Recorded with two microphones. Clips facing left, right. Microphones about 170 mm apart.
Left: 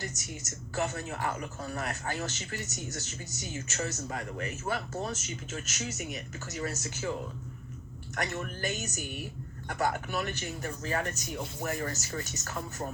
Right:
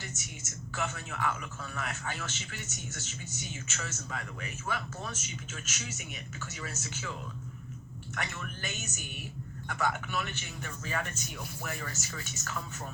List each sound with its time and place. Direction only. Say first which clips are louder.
0.8 s a man's voice: left 3 dB; 40° left (ahead or behind)
8.1 s a man's voice: left 5 dB; 40° left (ahead or behind)